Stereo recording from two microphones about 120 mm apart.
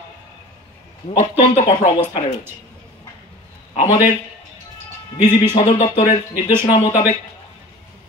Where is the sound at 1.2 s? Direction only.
70° left (ahead or behind).